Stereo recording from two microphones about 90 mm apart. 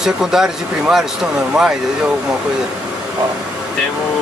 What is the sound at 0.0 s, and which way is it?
Speech, 5° right (ahead or behind).